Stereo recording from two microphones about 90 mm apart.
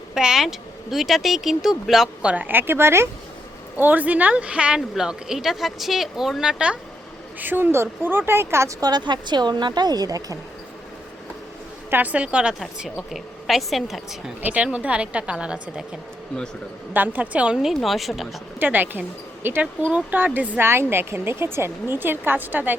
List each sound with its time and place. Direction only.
0.1 s a woman's voice: 5° right (ahead or behind)
2.3 s speech: 20° right (ahead or behind)
7.3 s speech: 20° right (ahead or behind)
8.8 s speech: 55° right (ahead or behind)
11.9 s a woman's voice: 20° right (ahead or behind); by 14.2 s centre (ahead or behind)
14.4 s speech: 15° right (ahead or behind)
16.9 s a woman's voice: 20° right (ahead or behind); by 18.3 s centre (ahead or behind)
18.6 s speech: 20° right (ahead or behind)